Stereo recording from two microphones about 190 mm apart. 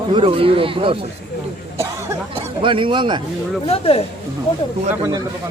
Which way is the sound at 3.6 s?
30° left (ahead or behind).